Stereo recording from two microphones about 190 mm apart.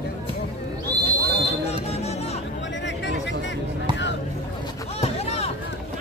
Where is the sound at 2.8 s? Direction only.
70° left (ahead or behind).